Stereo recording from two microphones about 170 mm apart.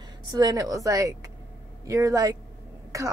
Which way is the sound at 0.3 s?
25° right (ahead or behind).